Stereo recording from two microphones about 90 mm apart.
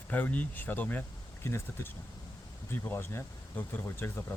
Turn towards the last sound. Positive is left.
turn(degrees=25)  # may be behind; listen again after turning